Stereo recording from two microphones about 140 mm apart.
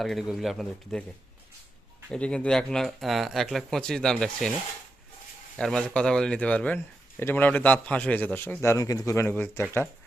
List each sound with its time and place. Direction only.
0.0 s speech: centre (ahead or behind)
2.0 s speech: 5° left (ahead or behind)
5.5 s speech: 5° left (ahead or behind)